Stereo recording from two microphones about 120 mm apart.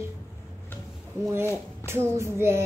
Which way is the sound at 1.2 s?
20° right (ahead or behind).